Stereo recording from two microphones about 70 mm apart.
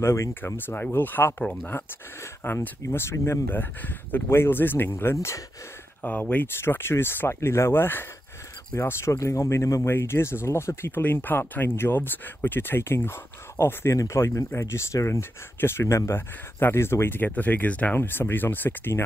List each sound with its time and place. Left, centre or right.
0.0 s speech: left
0.3 s speech: left
2.4 s speech: left
5.1 s speech: left
6.0 s speech: left
9.8 s speech: left
11.0 s speech: left